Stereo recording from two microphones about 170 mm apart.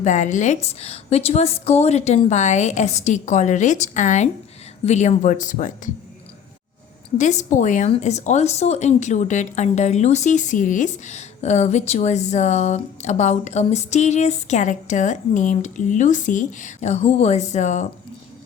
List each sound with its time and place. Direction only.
0.0 s speech: 45° left (ahead or behind)
7.2 s speech: 45° left (ahead or behind)